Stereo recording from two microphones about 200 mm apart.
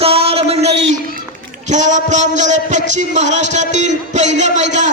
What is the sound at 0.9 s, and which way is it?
A man's voice, 40° right (ahead or behind).